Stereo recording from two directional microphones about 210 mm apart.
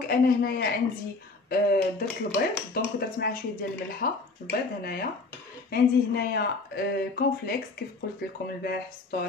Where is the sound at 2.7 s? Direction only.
45° left (ahead or behind).